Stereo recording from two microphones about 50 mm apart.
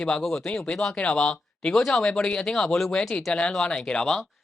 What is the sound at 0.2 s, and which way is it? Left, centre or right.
Speech, centre.